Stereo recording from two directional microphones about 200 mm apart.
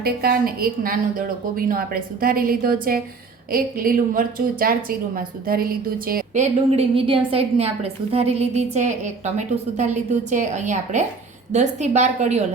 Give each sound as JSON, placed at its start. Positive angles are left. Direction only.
{"t": 0.0, "sound": "a woman's voice", "side_deg": -50}
{"t": 6.7, "sound": "a woman's voice", "side_deg": -30}